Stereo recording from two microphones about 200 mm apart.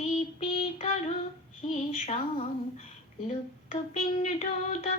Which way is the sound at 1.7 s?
35° left (ahead or behind).